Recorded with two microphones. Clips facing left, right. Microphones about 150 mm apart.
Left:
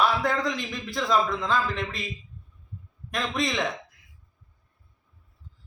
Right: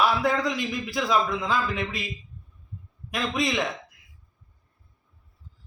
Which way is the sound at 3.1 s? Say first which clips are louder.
Right 1 dB; 5° right (ahead or behind).